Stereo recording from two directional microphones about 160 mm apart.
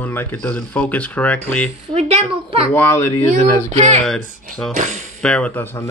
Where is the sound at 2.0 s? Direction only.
40° right (ahead or behind).